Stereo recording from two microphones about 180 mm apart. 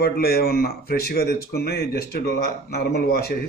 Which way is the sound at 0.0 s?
60° left (ahead or behind).